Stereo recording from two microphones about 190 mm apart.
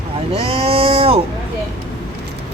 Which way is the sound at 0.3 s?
30° right (ahead or behind).